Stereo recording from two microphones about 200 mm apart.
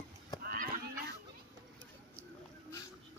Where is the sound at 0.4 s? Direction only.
45° right (ahead or behind).